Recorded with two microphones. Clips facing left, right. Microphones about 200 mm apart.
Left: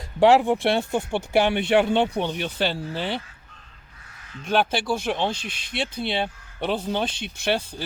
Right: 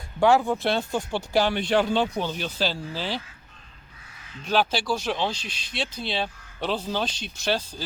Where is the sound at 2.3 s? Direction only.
60° left (ahead or behind).